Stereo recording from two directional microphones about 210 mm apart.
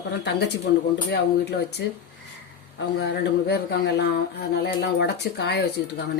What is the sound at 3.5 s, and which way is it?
Speech, 55° left (ahead or behind).